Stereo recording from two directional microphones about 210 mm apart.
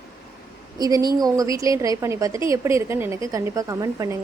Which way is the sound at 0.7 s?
20° right (ahead or behind).